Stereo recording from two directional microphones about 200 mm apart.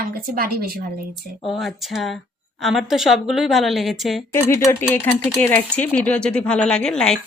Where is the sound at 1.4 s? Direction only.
Centre (ahead or behind).